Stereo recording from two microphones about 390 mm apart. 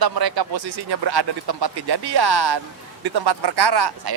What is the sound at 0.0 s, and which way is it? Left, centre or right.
Speech, right.